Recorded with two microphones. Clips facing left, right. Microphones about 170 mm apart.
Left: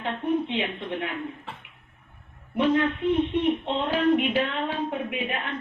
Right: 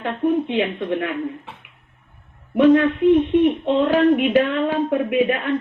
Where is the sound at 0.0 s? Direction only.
55° right (ahead or behind).